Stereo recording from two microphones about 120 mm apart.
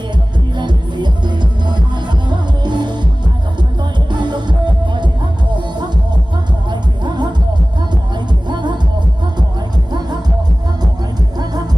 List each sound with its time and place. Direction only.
0.5 s music: 40° right (ahead or behind)
4.1 s music: 40° right (ahead or behind)
6.7 s music: 40° right (ahead or behind)